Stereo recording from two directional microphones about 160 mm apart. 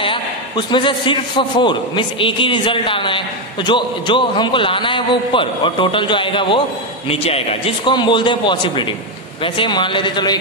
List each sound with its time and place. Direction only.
0.0 s a man's voice: 30° left (ahead or behind)